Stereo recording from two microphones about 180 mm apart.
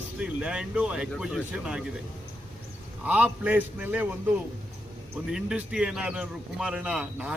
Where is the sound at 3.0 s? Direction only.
5° right (ahead or behind).